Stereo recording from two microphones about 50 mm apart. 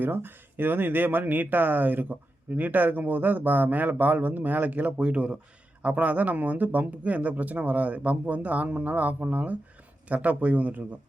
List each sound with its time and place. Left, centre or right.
0.0 s speech: right
4.9 s speech: right